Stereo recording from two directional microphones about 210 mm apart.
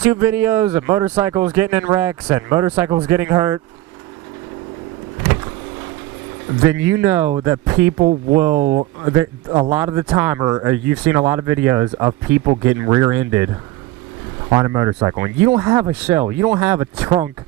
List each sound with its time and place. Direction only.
0.0 s speech: 10° right (ahead or behind)
6.7 s speech: 10° right (ahead or behind)
8.5 s speech: 35° right (ahead or behind)
9.0 s speech: 15° right (ahead or behind)
14.5 s speech: 15° right (ahead or behind)